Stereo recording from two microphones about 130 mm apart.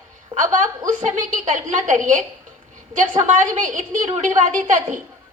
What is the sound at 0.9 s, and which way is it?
A woman's voice, 75° right (ahead or behind).